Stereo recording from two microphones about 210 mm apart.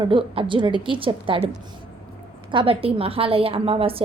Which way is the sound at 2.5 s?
25° right (ahead or behind).